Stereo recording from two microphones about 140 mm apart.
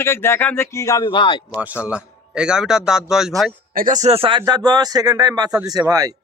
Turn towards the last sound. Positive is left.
turn(degrees=-25)  # may be behind; listen again after turning